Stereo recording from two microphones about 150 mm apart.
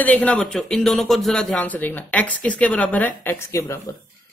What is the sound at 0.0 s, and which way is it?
Speech, 10° left (ahead or behind).